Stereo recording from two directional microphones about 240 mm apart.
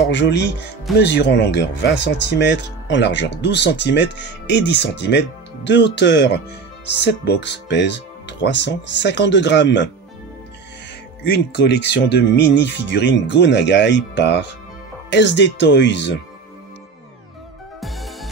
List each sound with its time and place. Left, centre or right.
0.1 s speech: left
11.2 s speech: left
17.7 s music: centre